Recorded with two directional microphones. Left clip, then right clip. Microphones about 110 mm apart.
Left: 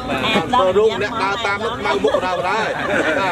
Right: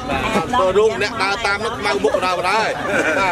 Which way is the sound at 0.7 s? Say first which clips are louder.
Even; 15° right (ahead or behind).